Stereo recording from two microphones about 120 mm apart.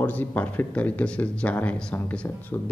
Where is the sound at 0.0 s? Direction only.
15° left (ahead or behind).